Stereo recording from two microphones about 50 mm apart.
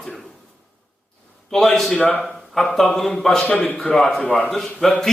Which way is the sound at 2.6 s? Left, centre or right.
Centre.